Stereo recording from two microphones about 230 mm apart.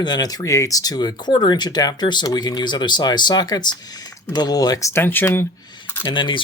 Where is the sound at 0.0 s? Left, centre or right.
Centre.